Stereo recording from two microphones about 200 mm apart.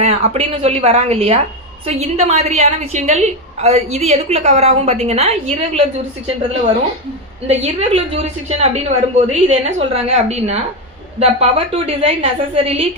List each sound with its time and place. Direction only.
0.0 s a woman's voice: 30° right (ahead or behind)
7.4 s a woman's voice: 30° right (ahead or behind)